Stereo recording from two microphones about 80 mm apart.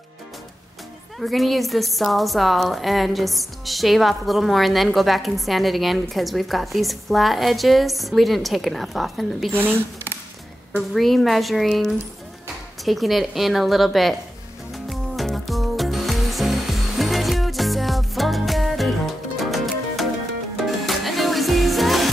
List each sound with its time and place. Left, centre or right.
1.2 s a woman's voice: centre
9.5 s speech: right
10.9 s a woman's voice: centre
14.7 s music: centre